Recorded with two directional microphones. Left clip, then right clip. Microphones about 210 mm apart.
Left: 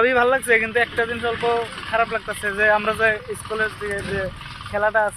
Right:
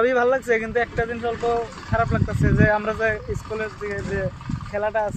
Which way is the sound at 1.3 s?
35° right (ahead or behind).